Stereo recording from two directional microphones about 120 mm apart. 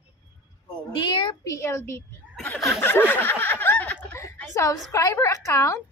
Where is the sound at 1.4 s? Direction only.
25° left (ahead or behind).